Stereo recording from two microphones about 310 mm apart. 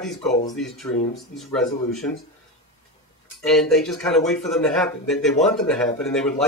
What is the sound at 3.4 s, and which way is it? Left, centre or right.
Speech, centre.